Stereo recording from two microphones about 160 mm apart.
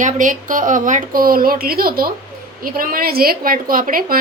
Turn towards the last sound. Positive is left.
turn(degrees=-60)  # may be behind; listen again after turning